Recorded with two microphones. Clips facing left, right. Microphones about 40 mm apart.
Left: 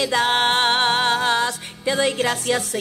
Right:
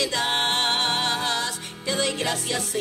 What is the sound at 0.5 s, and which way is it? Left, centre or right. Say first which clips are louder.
Music: left 5 dB; left.